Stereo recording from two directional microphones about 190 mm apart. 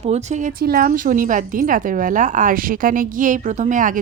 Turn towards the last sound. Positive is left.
turn(degrees=-45)  # may be behind; listen again after turning